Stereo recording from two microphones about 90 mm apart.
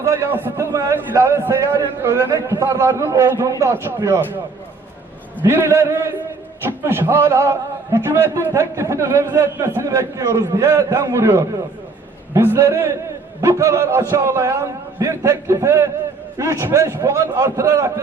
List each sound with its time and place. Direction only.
0.0 s a man's voice: 35° right (ahead or behind)
0.3 s a man's voice: 25° right (ahead or behind)
5.5 s a man's voice: 30° right (ahead or behind)